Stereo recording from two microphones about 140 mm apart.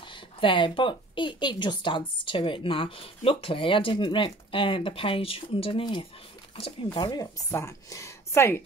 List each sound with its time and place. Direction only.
0.1 s a woman's voice: 35° left (ahead or behind); by 8.6 s 15° left (ahead or behind)